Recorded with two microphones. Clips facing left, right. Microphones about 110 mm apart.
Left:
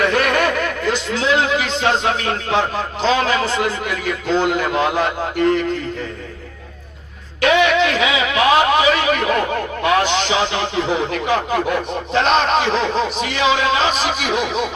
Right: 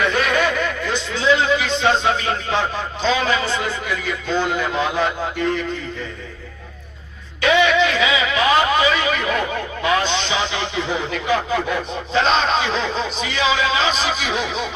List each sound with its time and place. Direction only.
0.0 s a sound: 60° left (ahead or behind)
0.9 s a man's voice: 75° left (ahead or behind)
4.7 s a man's voice: 55° left (ahead or behind)
7.4 s a man's voice: 55° left (ahead or behind)
11.1 s a man's voice: 55° left (ahead or behind)